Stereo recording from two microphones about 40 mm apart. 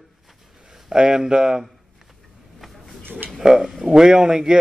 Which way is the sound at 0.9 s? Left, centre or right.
Centre.